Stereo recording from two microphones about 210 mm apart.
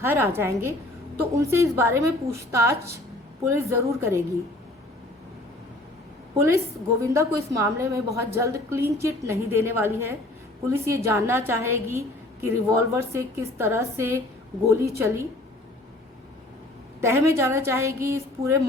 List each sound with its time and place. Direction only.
0.0 s a woman's voice: 10° right (ahead or behind)
6.3 s a woman's voice: 15° right (ahead or behind)
17.0 s a woman's voice: 15° right (ahead or behind)